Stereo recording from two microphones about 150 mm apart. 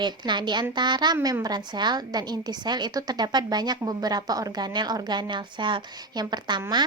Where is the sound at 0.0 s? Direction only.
30° right (ahead or behind).